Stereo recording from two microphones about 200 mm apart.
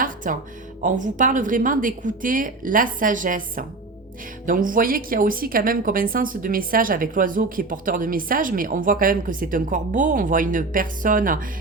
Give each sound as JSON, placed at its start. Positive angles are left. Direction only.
{"t": 0.2, "sound": "a woman's voice", "side_deg": -40}